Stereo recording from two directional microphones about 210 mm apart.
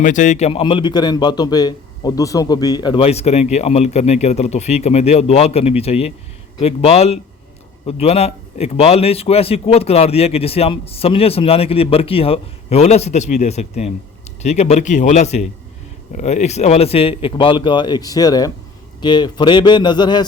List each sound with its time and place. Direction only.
0.0 s a man's voice: 35° left (ahead or behind); by 20.2 s 20° left (ahead or behind)